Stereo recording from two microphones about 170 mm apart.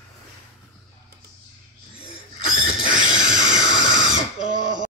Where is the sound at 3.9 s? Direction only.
90° right.